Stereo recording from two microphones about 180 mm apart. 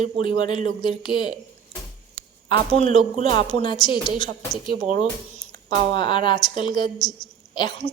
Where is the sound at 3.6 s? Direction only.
25° left (ahead or behind).